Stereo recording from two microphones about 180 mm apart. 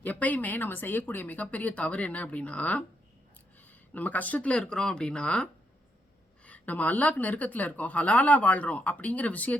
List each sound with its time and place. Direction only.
0.0 s a woman's voice: 10° left (ahead or behind)
3.9 s a woman's voice: 10° left (ahead or behind)